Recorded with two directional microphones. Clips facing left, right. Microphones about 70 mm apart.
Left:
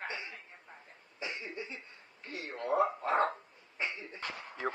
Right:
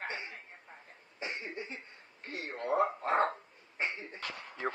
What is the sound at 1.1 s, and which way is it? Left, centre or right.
Cough, right.